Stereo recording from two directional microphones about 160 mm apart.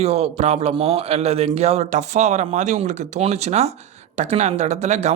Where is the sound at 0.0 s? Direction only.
40° right (ahead or behind).